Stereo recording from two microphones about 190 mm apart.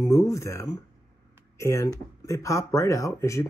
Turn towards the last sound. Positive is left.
turn(degrees=15)  # may be behind; listen again after turning